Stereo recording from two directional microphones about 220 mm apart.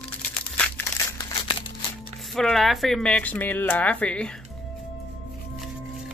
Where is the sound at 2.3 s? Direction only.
Centre (ahead or behind).